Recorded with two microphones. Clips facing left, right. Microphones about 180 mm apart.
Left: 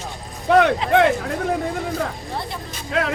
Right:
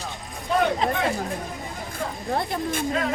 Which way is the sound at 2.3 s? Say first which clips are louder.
Right 4 dB; 50° right (ahead or behind).